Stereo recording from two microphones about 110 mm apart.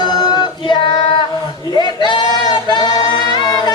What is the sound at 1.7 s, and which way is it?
Singing, 45° left (ahead or behind).